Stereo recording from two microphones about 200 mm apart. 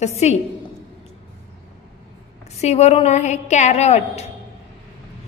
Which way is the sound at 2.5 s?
30° left (ahead or behind).